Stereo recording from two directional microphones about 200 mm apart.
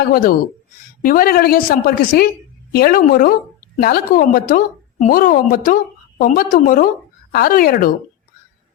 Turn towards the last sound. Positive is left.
turn(degrees=45)  # may be behind; listen again after turning